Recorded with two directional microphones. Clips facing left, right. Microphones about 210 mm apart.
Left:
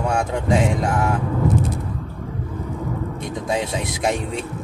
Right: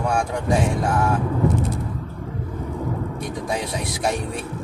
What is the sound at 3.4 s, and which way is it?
Speech, 20° left (ahead or behind).